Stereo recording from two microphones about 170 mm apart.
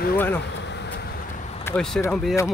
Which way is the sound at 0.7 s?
90° left.